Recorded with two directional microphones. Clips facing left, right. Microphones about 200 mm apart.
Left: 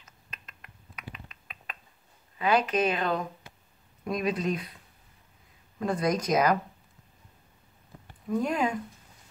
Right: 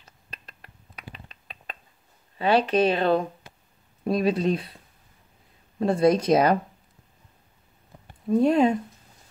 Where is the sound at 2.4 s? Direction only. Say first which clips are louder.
Right 5 dB; 30° right (ahead or behind).